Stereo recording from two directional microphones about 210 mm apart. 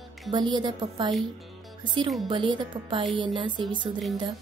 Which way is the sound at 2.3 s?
20° right (ahead or behind).